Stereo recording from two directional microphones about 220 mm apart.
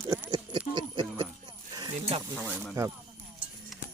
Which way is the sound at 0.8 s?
20° right (ahead or behind).